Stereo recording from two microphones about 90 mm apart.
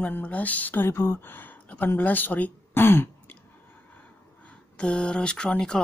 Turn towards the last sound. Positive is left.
turn(degrees=10)  # may be behind; listen again after turning